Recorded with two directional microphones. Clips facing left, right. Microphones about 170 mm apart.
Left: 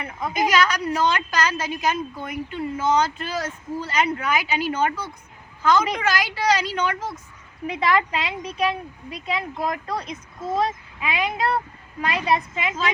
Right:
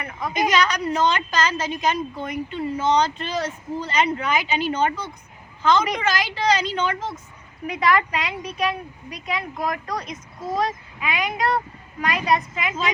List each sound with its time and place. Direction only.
0.2 s a woman's voice: 5° left (ahead or behind)
7.7 s speech: 25° left (ahead or behind)